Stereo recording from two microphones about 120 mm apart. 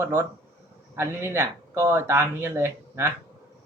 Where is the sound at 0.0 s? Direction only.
25° right (ahead or behind).